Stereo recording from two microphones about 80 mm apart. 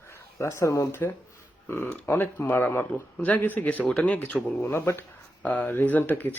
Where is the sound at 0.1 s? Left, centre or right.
Left; by 4.5 s centre.